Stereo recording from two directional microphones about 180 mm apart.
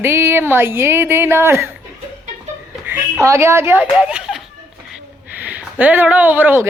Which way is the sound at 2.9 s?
15° right (ahead or behind).